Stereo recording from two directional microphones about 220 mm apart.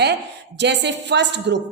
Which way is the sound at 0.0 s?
50° right (ahead or behind).